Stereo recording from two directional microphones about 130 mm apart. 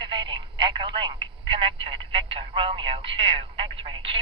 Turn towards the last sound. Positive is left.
turn(degrees=-45)  # may be behind; listen again after turning